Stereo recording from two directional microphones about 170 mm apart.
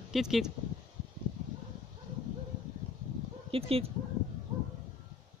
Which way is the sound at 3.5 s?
35° right (ahead or behind).